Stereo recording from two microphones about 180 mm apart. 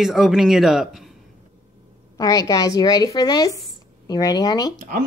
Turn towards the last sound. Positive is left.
turn(degrees=-50)  # may be behind; listen again after turning